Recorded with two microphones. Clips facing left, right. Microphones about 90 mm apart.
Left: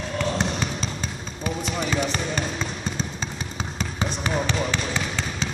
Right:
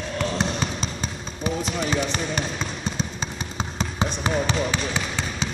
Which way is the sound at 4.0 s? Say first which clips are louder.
Right 2 dB; 20° right (ahead or behind).